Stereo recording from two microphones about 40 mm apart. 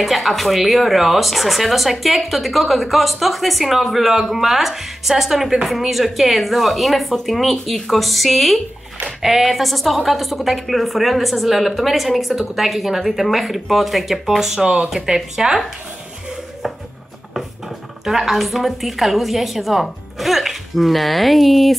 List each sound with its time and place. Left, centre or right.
0.0 s speech: centre
14.6 s speech: centre
18.0 s speech: centre